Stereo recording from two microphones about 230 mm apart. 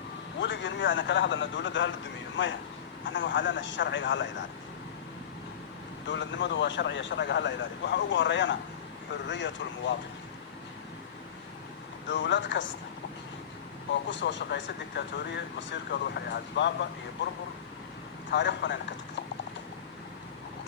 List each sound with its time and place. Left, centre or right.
0.3 s a man's voice: left
6.1 s speech: left
12.0 s speech: left
14.1 s speech: left
18.3 s speech: left